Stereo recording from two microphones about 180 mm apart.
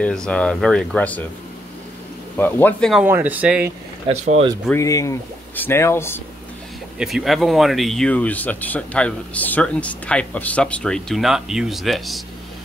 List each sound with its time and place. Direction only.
0.0 s speech: 5° left (ahead or behind)
2.3 s speech: 10° left (ahead or behind)
2.9 s speech: 10° right (ahead or behind)
4.1 s speech: 40° right (ahead or behind)
4.6 s speech: 15° left (ahead or behind)
7.0 s speech: centre (ahead or behind)